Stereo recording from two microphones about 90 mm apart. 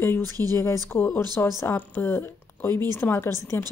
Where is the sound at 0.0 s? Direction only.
25° left (ahead or behind).